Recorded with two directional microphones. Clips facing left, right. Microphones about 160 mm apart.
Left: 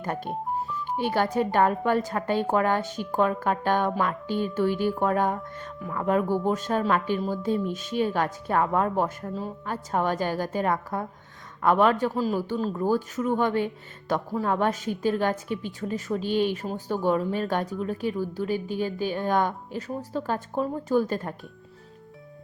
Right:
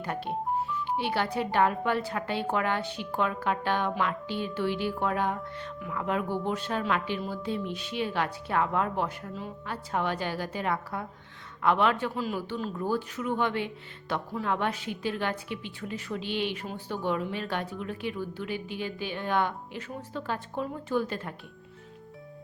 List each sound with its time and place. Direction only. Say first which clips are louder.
0.0 s a woman's voice: left 1 dB; 45° left (ahead or behind)